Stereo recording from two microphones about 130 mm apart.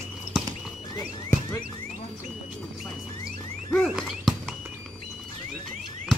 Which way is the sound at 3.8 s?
Centre (ahead or behind).